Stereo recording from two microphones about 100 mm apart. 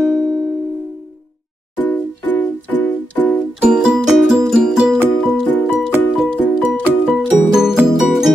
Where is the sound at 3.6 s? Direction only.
10° right (ahead or behind).